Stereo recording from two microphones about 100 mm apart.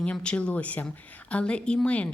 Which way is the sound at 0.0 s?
10° left (ahead or behind).